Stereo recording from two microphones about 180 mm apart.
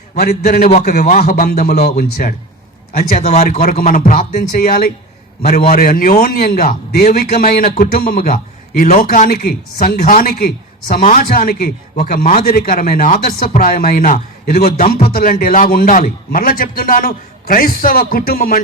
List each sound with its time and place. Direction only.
0.9 s a man's voice: 45° left (ahead or behind)